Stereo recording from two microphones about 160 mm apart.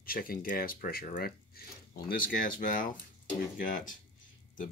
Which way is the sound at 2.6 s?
55° left (ahead or behind).